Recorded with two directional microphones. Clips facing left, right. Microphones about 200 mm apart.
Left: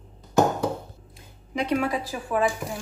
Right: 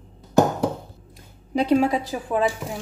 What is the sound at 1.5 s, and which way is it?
Speech, 30° right (ahead or behind).